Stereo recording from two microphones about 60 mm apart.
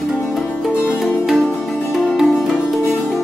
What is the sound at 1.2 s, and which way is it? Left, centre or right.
Music, centre.